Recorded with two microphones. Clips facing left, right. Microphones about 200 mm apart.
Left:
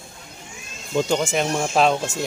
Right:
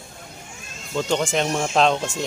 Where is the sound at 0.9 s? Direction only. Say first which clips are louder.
Left 1 dB; 10° left (ahead or behind).